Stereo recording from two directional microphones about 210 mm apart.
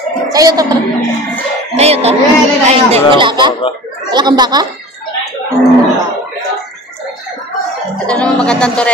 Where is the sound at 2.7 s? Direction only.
30° right (ahead or behind).